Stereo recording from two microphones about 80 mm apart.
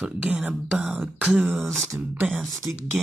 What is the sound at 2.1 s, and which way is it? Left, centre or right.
Speech, right.